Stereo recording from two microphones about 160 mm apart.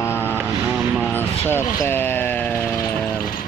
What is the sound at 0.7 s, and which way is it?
Vehicle, centre (ahead or behind).